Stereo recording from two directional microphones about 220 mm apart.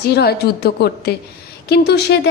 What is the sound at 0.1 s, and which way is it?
A woman's voice, 45° left (ahead or behind).